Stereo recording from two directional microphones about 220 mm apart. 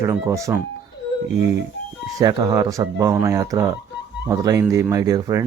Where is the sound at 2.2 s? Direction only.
20° right (ahead or behind).